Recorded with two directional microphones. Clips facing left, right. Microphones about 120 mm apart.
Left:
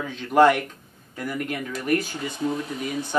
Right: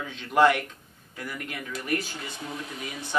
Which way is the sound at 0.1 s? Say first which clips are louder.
Left 4 dB; 45° left (ahead or behind).